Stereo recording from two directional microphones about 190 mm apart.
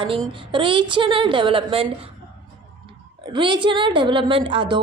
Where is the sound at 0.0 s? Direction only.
25° right (ahead or behind).